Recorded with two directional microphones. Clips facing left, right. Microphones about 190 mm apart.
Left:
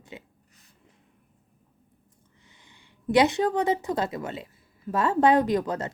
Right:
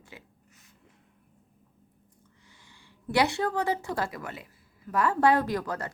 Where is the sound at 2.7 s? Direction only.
20° left (ahead or behind).